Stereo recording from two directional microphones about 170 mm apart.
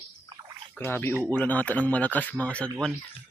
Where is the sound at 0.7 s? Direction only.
15° left (ahead or behind).